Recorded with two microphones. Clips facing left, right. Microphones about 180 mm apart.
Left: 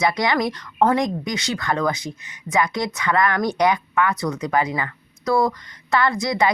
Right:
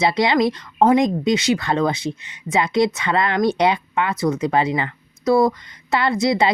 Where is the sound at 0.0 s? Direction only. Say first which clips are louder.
Right 3 dB; 25° right (ahead or behind).